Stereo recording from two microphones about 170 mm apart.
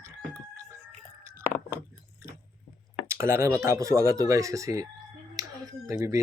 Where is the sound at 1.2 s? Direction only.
15° right (ahead or behind).